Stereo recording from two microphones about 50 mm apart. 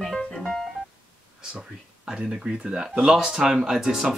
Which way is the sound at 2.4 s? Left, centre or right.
Centre.